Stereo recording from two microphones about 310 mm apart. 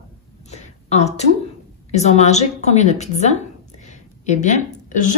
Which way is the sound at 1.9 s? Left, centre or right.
Left.